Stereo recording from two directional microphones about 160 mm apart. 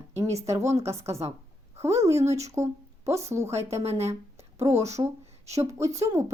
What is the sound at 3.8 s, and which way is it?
Speech, 40° right (ahead or behind).